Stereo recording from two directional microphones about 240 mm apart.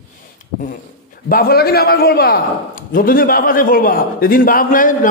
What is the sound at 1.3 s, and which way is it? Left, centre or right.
A man's voice, left.